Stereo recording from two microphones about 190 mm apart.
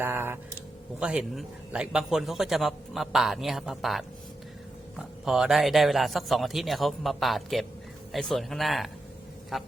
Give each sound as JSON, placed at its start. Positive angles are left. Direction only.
{"t": 0.0, "sound": "a man's voice", "side_deg": -10}